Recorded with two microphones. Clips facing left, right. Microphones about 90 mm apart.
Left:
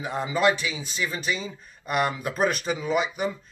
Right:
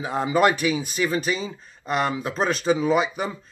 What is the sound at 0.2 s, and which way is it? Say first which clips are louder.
Speech: right 4 dB; 45° right (ahead or behind).